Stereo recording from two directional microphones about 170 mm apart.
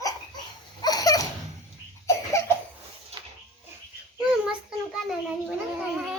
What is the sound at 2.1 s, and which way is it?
Cough, 20° left (ahead or behind).